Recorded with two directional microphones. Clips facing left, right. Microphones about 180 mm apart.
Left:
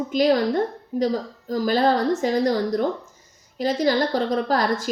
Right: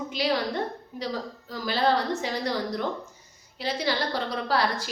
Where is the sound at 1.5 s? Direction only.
45° left (ahead or behind).